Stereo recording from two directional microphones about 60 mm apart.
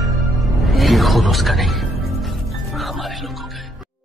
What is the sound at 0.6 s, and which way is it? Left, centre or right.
Music, centre.